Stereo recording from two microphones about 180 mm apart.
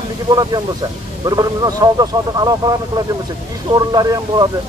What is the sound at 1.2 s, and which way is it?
Speech, 20° right (ahead or behind).